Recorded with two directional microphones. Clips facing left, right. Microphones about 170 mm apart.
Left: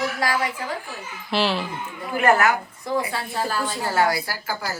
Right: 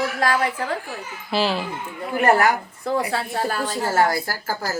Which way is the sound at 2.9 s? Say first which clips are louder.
Right 3 dB; 65° right (ahead or behind).